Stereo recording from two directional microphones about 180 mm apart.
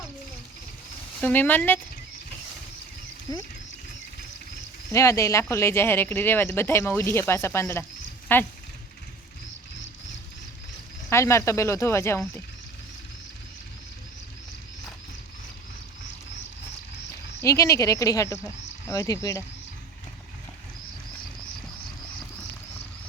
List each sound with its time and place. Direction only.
1.2 s speech: 10° left (ahead or behind)
4.9 s speech: 15° left (ahead or behind)
11.1 s speech: 15° left (ahead or behind)
17.4 s speech: 15° left (ahead or behind)